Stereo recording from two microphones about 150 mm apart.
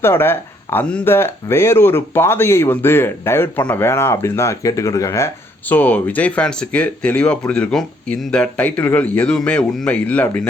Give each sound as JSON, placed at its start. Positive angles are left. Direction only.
{"t": 0.0, "sound": "speech", "side_deg": 15}